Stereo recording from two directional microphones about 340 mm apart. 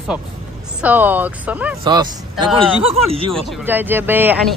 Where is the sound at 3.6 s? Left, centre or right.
Centre.